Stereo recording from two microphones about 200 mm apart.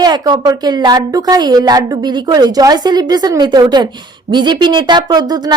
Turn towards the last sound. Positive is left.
turn(degrees=-20)  # may be behind; listen again after turning